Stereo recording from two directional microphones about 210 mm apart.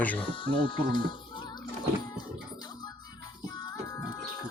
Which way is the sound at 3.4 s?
20° left (ahead or behind).